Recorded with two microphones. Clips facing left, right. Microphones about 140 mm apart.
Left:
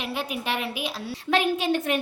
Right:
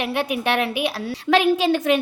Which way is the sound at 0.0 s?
65° right (ahead or behind).